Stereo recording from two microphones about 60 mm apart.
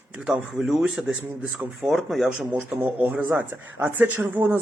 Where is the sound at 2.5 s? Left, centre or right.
Right.